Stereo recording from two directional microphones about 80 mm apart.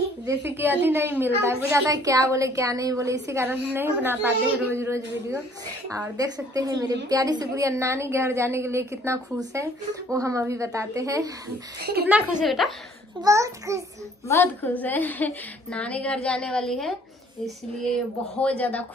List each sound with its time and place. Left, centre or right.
0.3 s a woman's voice: right
1.9 s a woman's voice: right
3.4 s a woman's voice: right
4.7 s a woman's voice: right
5.9 s a woman's voice: right
12.4 s a woman's voice: centre
13.2 s a woman's voice: right
14.3 s a woman's voice: left; by 16.9 s centre
17.9 s a woman's voice: centre